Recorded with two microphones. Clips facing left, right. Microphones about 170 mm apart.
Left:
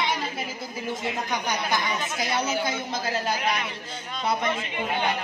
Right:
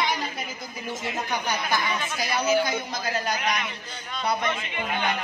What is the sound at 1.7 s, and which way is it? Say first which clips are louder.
A woman's voice: even; 25° left (ahead or behind).